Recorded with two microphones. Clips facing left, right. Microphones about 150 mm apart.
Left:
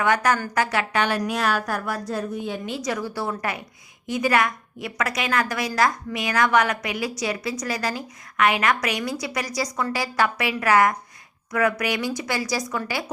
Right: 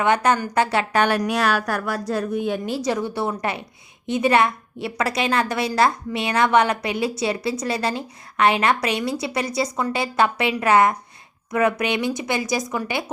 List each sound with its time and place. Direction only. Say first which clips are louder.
0.0 s a woman's voice: right 2 dB; 25° right (ahead or behind)
0.9 s a woman's voice: right 4 dB; 60° right (ahead or behind)
2.6 s a woman's voice: right 4 dB; 35° right (ahead or behind)